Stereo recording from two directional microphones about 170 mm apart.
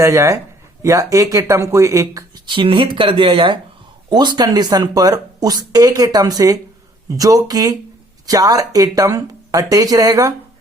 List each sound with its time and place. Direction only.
0.0 s speech: 15° right (ahead or behind)